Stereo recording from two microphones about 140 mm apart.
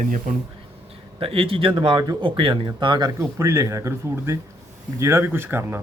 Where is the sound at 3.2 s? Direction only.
20° right (ahead or behind).